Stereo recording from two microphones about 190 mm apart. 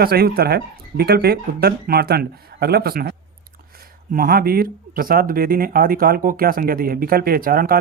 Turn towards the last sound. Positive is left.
turn(degrees=-50)  # may be behind; listen again after turning